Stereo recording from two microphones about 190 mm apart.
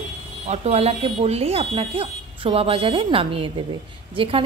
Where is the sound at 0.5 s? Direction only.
35° right (ahead or behind).